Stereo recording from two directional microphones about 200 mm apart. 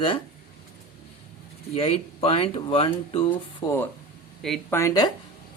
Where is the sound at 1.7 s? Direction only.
30° left (ahead or behind).